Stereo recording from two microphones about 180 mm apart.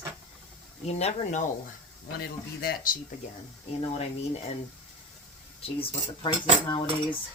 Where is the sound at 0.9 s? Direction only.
40° left (ahead or behind).